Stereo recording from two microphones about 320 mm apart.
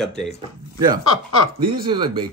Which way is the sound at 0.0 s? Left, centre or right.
Centre.